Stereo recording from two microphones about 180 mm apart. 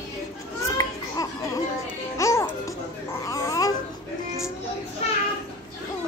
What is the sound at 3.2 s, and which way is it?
Babbling, 20° left (ahead or behind).